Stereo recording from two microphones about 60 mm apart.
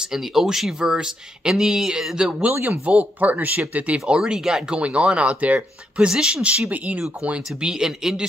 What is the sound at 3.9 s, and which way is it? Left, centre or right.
Speech, centre.